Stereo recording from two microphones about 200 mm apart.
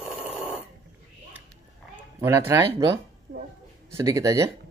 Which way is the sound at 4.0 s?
15° right (ahead or behind).